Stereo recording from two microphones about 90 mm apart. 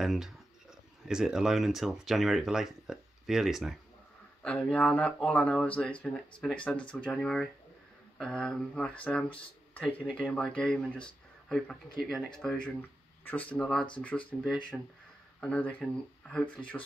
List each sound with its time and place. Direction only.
0.0 s speech: 5° right (ahead or behind)
4.4 s speech: 15° left (ahead or behind)
13.2 s speech: 20° left (ahead or behind)